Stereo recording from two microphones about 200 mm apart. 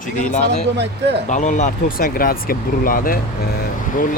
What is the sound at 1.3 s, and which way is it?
Speech, 40° left (ahead or behind).